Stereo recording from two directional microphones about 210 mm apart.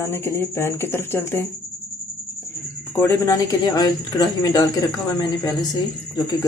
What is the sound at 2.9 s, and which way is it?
Speech, 10° left (ahead or behind).